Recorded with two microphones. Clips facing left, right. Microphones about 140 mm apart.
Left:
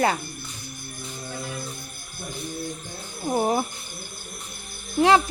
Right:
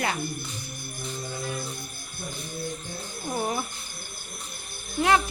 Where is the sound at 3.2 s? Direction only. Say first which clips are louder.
Left 6 dB; 30° left (ahead or behind).